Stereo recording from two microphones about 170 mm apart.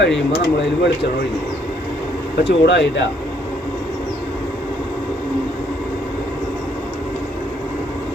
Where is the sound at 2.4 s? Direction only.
90° left.